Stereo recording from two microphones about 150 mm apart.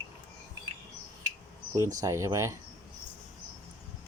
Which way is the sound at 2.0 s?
20° right (ahead or behind).